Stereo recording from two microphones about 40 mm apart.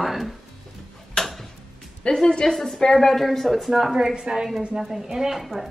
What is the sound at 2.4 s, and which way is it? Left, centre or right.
A woman's voice, centre.